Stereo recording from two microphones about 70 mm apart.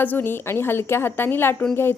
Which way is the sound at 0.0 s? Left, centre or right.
Left.